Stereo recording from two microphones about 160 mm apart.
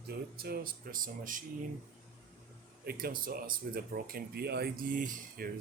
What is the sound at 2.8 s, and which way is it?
Speech, 70° right (ahead or behind).